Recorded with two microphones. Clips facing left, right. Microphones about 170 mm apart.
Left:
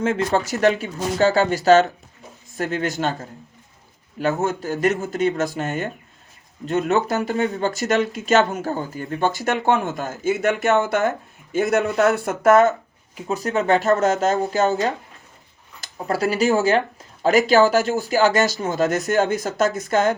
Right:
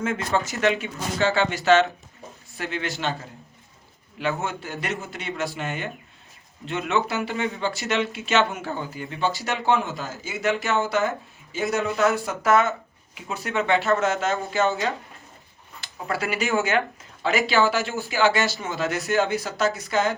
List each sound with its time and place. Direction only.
0.0 s a man's voice: 35° left (ahead or behind)